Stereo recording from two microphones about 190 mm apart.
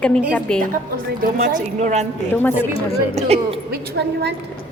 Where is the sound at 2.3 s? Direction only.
10° left (ahead or behind).